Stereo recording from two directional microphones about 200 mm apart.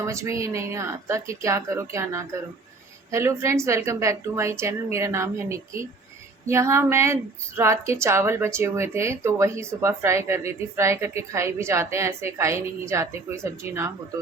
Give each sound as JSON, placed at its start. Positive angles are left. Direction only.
{"t": 0.0, "sound": "a woman's voice", "side_deg": -15}